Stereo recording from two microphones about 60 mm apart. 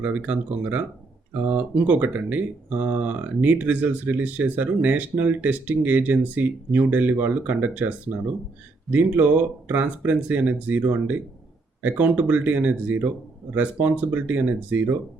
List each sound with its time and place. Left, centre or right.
0.0 s speech: right